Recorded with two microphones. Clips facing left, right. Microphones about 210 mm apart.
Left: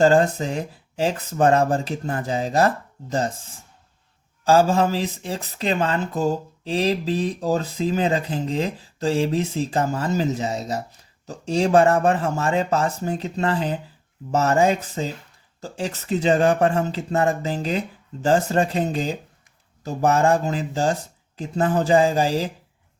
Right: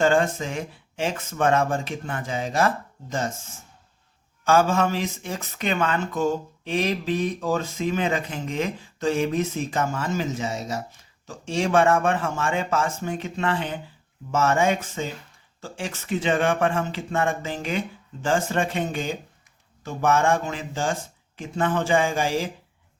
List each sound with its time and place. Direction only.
0.0 s speech: 35° left (ahead or behind)